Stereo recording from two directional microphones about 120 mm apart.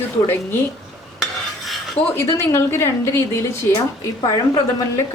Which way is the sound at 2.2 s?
20° left (ahead or behind).